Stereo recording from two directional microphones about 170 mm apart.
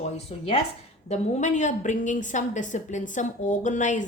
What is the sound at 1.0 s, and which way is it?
A woman's voice, 40° left (ahead or behind).